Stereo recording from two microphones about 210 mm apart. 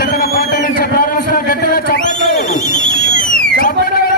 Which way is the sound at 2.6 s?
55° right (ahead or behind).